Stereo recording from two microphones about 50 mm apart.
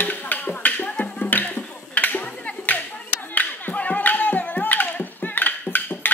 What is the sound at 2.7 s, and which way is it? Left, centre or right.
Clapping, left.